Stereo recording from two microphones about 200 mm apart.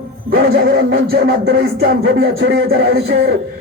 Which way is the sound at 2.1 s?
70° right (ahead or behind).